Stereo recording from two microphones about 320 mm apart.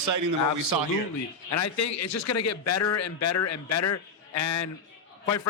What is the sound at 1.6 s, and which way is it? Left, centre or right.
A man's voice, left.